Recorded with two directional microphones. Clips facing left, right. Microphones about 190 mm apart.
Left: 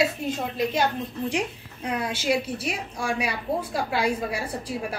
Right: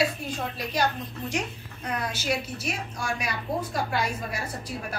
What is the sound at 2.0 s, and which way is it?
A woman's voice, 30° left (ahead or behind).